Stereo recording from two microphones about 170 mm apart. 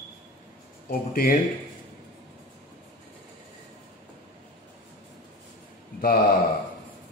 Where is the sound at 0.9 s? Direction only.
55° left (ahead or behind).